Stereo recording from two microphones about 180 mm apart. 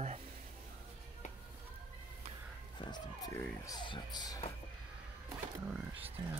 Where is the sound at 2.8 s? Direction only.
25° left (ahead or behind).